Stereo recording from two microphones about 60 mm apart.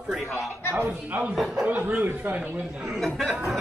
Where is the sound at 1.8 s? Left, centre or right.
Right.